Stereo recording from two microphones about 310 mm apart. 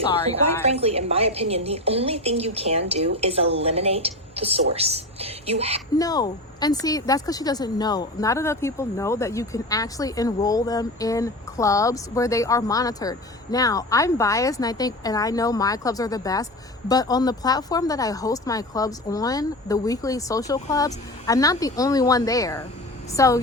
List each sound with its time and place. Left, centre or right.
0.6 s a woman's voice: centre
6.0 s speech: centre